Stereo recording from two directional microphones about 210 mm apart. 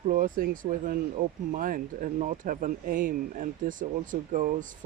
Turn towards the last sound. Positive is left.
turn(degrees=-40)  # may be behind; listen again after turning